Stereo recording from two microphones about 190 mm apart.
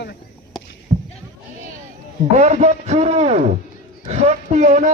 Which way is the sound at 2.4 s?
35° right (ahead or behind).